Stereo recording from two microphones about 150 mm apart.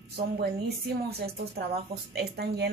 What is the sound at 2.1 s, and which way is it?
Speech, 90° right.